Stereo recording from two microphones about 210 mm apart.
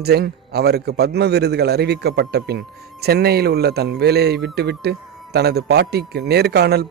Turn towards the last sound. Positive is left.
turn(degrees=-50)  # may be behind; listen again after turning